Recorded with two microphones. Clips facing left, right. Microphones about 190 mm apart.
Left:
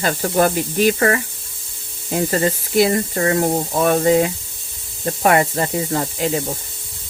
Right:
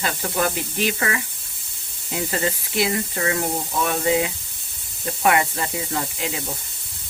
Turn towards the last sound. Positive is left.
turn(degrees=40)  # may be behind; listen again after turning